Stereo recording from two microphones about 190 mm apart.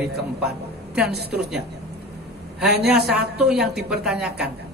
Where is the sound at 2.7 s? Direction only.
60° right (ahead or behind).